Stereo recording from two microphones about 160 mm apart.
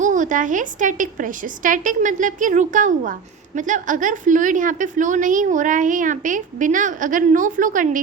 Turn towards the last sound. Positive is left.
turn(degrees=-55)  # may be behind; listen again after turning